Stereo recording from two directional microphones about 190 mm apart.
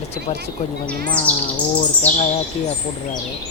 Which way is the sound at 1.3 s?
10° left (ahead or behind).